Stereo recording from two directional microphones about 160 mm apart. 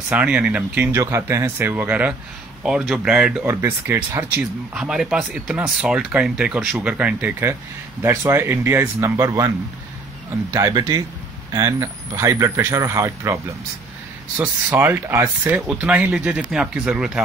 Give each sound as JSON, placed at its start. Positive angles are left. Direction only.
{"t": 0.1, "sound": "speech", "side_deg": -5}
{"t": 4.4, "sound": "speech", "side_deg": -5}
{"t": 10.5, "sound": "speech", "side_deg": -20}
{"t": 14.4, "sound": "speech", "side_deg": -15}